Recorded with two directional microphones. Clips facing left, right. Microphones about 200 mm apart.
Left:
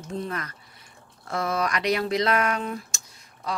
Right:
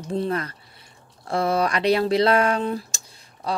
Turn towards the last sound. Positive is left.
turn(degrees=-30)  # may be behind; listen again after turning